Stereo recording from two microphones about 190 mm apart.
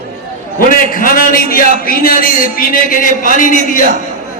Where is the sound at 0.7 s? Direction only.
50° left (ahead or behind).